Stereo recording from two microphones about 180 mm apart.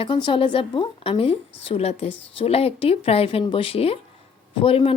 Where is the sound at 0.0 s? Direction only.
25° left (ahead or behind).